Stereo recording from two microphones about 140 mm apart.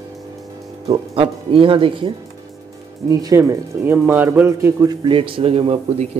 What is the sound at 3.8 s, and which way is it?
Speech, 15° right (ahead or behind).